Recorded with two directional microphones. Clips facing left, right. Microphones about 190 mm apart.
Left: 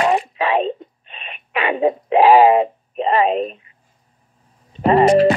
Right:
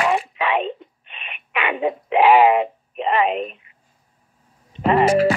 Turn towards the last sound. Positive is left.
turn(degrees=35)  # may be behind; listen again after turning